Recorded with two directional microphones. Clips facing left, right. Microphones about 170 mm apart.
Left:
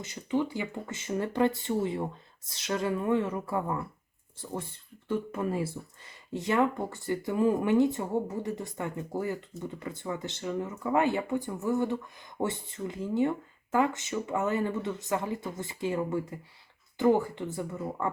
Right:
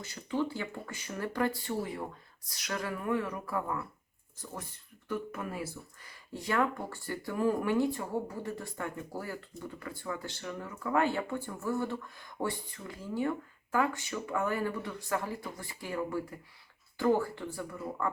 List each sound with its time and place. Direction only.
0.0 s speech: 20° left (ahead or behind)